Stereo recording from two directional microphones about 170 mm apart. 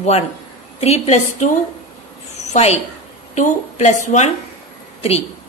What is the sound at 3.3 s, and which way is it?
Speech, 45° left (ahead or behind).